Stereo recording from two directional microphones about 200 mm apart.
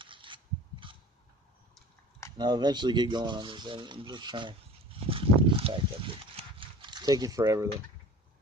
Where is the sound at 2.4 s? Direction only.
20° right (ahead or behind).